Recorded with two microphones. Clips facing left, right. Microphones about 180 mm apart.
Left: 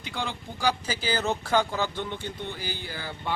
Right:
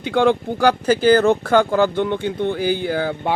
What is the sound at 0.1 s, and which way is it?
Speech, 60° right (ahead or behind).